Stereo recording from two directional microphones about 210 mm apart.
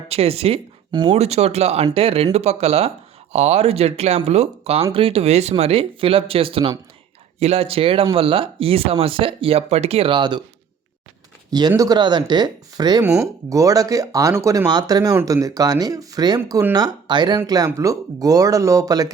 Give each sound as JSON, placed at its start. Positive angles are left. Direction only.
{"t": 0.1, "sound": "speech", "side_deg": -30}
{"t": 11.7, "sound": "speech", "side_deg": -15}